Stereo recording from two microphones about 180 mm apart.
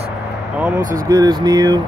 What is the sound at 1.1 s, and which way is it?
Speech, 20° right (ahead or behind).